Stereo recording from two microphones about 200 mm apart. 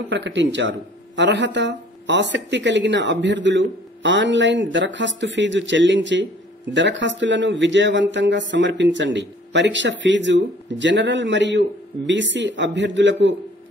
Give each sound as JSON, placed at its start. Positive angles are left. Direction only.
{"t": 0.1, "sound": "speech", "side_deg": -70}